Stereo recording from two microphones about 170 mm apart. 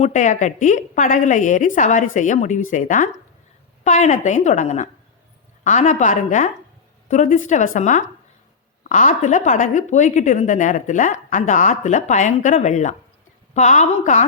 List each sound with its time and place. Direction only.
0.0 s a woman's voice: 45° left (ahead or behind)